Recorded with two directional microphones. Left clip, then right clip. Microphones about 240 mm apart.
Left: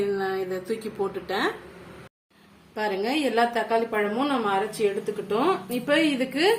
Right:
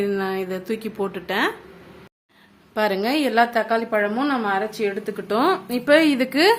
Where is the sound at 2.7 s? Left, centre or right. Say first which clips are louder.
Right 5 dB; right.